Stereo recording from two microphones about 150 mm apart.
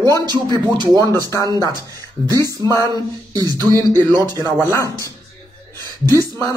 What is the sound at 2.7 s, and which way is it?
Speech, 20° left (ahead or behind).